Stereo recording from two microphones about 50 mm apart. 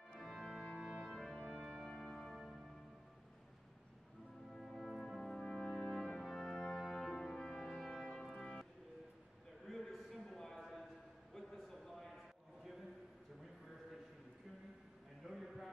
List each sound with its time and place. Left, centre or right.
0.2 s organ: centre
1.0 s brass instrument: centre
1.9 s music: centre
2.1 s music: centre
4.6 s brass instrument: centre
6.9 s music: centre
7.4 s brass instrument: centre
8.4 s music: centre
9.7 s a sound: centre
15.2 s a sound: centre